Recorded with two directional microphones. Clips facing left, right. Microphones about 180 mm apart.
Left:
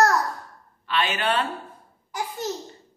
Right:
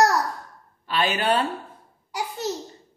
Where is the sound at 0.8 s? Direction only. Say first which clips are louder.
Right 2 dB; 35° right (ahead or behind).